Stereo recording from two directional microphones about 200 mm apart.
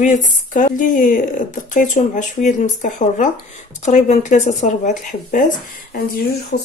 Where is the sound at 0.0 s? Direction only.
40° left (ahead or behind).